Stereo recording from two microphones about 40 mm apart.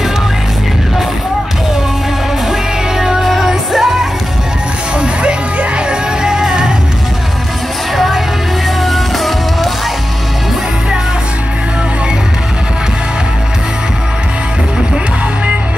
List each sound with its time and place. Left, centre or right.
3.0 s music: centre
4.9 s music: right
7.9 s music: centre